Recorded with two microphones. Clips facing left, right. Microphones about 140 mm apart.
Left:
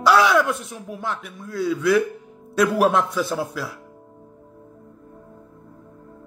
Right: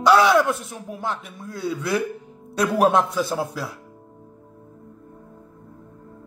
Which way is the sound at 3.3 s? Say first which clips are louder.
Even; 25° right (ahead or behind).